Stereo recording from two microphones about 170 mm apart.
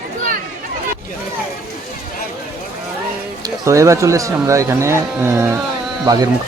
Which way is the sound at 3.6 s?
20° right (ahead or behind).